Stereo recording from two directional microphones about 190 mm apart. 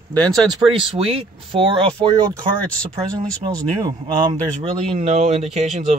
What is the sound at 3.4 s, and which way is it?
Speech, 20° right (ahead or behind).